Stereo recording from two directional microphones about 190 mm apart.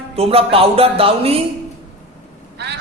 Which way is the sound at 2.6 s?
65° right (ahead or behind).